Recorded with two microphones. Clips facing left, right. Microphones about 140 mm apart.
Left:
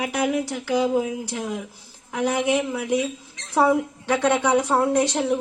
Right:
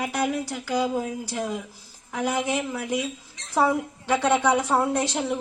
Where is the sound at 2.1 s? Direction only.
Centre (ahead or behind).